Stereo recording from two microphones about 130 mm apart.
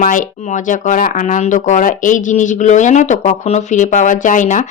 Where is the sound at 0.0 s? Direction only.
85° left.